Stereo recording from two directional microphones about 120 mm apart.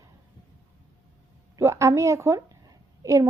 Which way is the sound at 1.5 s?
25° right (ahead or behind).